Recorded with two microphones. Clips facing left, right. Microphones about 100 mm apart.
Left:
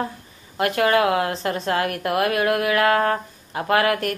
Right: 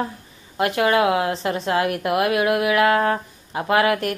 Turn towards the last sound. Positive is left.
turn(degrees=-20)  # may be behind; listen again after turning